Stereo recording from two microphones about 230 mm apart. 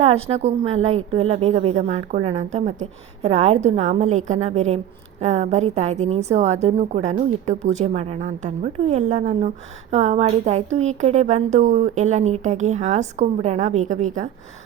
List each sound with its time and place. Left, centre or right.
0.0 s a woman's voice: right